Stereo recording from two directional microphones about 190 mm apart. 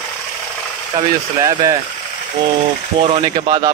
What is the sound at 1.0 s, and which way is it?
Speech, 20° right (ahead or behind).